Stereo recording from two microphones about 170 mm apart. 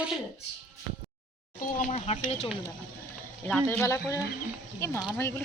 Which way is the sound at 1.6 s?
50° left (ahead or behind).